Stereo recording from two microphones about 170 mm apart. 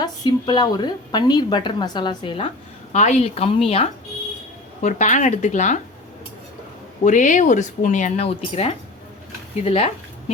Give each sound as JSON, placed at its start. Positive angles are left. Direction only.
{"t": 0.0, "sound": "a woman's voice", "side_deg": 25}
{"t": 2.9, "sound": "a woman's voice", "side_deg": 45}
{"t": 4.8, "sound": "speech", "side_deg": 45}
{"t": 7.0, "sound": "speech", "side_deg": 50}